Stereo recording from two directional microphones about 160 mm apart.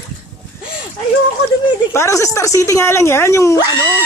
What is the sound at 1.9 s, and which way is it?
Speech, 20° left (ahead or behind).